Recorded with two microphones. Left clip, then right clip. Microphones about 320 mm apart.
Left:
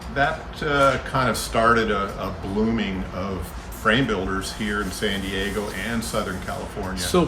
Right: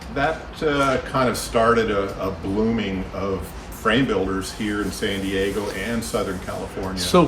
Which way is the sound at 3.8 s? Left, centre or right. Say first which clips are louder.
Right 1 dB; centre.